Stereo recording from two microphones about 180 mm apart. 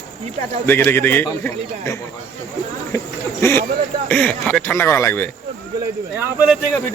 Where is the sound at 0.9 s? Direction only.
10° left (ahead or behind).